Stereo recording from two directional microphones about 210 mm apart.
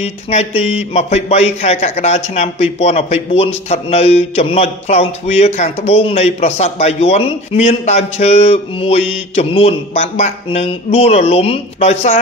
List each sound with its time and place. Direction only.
0.0 s speech: 30° left (ahead or behind)